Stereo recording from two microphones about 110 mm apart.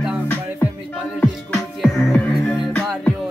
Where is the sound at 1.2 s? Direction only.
Centre (ahead or behind).